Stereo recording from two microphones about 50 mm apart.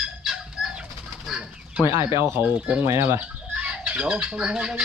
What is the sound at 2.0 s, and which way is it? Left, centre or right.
Speech, right.